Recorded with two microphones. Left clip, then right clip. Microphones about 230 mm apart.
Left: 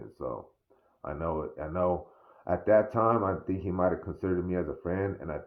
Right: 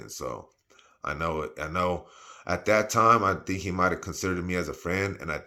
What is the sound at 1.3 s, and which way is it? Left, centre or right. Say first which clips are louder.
Speech: right 3 dB; centre.